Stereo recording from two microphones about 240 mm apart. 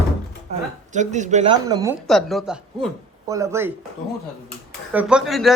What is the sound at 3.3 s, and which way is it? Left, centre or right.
Speech, centre.